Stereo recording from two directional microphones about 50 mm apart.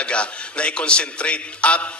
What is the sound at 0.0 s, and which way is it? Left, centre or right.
A man's voice, left.